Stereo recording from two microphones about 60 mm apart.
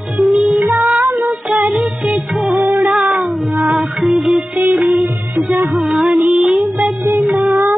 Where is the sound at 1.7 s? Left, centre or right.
Centre.